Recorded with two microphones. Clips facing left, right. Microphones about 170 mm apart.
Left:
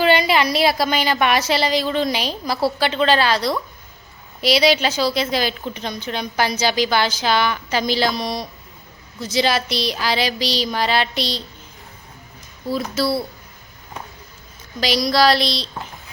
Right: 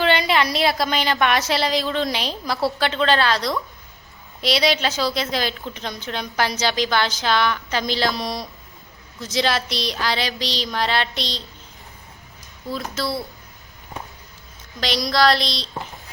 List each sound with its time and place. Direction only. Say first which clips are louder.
0.0 s a woman's voice: left 3 dB; 5° left (ahead or behind)
12.6 s speech: left 5 dB; 5° left (ahead or behind)
14.8 s a woman's voice: left 3 dB; centre (ahead or behind)